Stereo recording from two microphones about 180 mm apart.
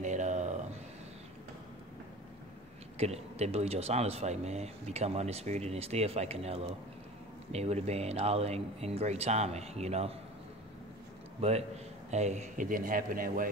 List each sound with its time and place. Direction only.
0.0 s a sound: 40° right (ahead or behind)
3.0 s speech: 35° right (ahead or behind)
11.4 s a man's voice: 35° right (ahead or behind)